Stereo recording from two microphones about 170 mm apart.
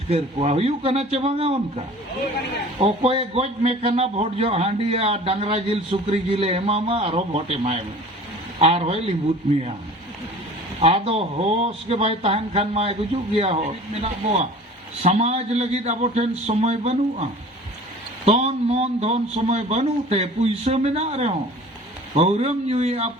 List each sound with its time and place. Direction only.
0.1 s a man's voice: 35° right (ahead or behind)
2.8 s a man's voice: 35° right (ahead or behind)
10.8 s a man's voice: 35° right (ahead or behind)
15.0 s a man's voice: 40° right (ahead or behind)
18.3 s a man's voice: 40° right (ahead or behind)